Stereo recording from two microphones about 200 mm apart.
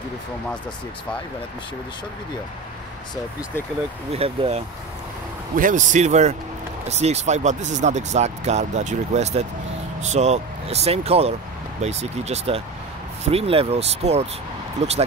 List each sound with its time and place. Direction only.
4.1 s speech: 30° right (ahead or behind)